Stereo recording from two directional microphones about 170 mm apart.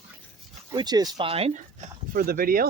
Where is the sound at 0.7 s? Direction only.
25° right (ahead or behind).